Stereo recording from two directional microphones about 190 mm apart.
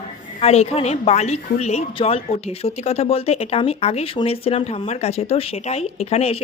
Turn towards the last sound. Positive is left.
turn(degrees=35)  # may be behind; listen again after turning